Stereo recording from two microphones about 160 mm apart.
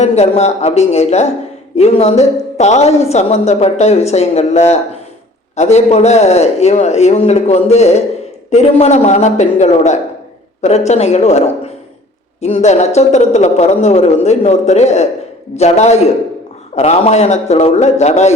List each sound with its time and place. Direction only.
0.0 s a woman's voice: 45° left (ahead or behind)